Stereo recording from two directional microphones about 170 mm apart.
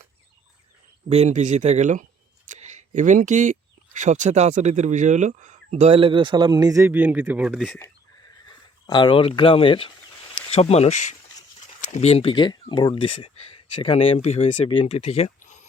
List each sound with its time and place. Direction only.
1.1 s speech: 40° right (ahead or behind); by 6.9 s 20° right (ahead or behind)
6.9 s speech: 10° right (ahead or behind)
8.4 s speech: 25° left (ahead or behind)
15.4 s a sound: 45° left (ahead or behind)